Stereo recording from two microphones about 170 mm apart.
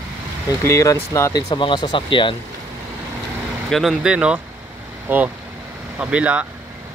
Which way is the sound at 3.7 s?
Centre (ahead or behind).